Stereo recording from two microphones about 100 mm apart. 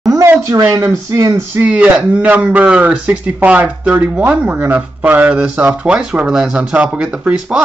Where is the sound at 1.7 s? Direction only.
10° right (ahead or behind).